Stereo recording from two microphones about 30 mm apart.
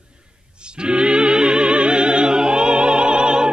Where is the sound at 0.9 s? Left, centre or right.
Right.